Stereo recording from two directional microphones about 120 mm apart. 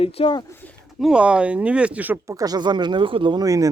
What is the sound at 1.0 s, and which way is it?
Speech, 10° right (ahead or behind).